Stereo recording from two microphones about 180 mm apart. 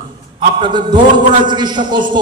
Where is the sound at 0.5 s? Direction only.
25° right (ahead or behind).